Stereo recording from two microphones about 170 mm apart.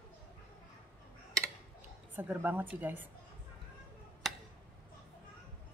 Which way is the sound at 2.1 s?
10° right (ahead or behind).